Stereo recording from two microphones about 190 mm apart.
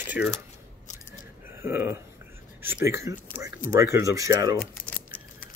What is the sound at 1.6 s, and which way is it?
Speech, 10° right (ahead or behind).